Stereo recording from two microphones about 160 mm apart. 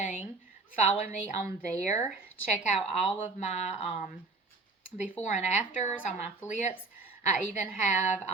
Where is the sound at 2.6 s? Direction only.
45° left (ahead or behind).